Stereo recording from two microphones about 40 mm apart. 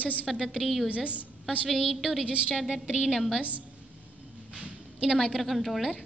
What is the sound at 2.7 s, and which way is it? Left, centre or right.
Speech, centre.